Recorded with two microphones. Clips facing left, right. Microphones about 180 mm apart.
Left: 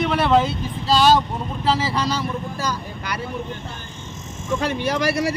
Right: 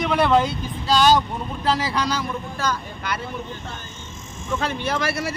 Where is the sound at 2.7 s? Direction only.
40° left (ahead or behind).